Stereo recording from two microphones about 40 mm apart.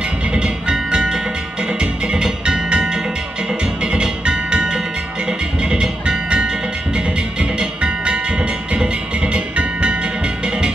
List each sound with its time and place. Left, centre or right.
0.3 s music: right